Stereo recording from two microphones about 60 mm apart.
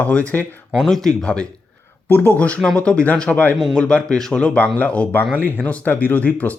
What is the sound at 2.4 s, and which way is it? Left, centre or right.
Speech, left.